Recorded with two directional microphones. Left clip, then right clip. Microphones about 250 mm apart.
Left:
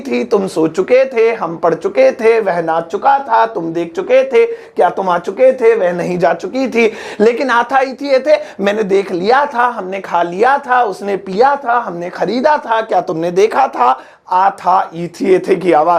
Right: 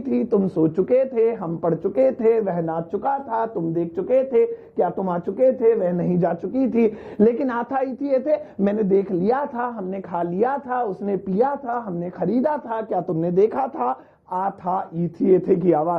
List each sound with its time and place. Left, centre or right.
0.1 s speech: centre